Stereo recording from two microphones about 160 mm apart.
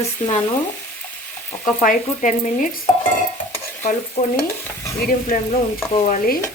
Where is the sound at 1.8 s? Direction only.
55° left (ahead or behind).